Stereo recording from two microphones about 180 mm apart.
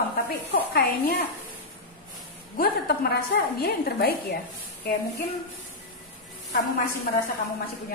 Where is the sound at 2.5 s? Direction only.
55° left (ahead or behind).